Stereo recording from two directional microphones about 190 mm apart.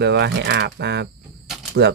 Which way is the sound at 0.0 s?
65° right (ahead or behind).